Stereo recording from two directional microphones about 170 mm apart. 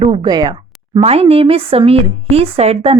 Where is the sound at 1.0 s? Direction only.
35° right (ahead or behind).